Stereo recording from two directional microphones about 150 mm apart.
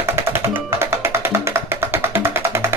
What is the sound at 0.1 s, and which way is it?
Music, 15° right (ahead or behind).